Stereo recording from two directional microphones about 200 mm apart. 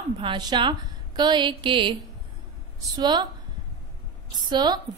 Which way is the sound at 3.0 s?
20° right (ahead or behind).